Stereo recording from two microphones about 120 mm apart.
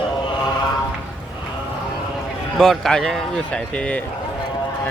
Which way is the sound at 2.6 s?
5° left (ahead or behind).